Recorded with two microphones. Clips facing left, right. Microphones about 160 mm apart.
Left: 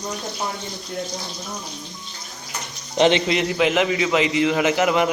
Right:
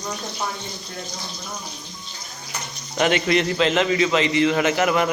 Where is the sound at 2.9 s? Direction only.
25° left (ahead or behind).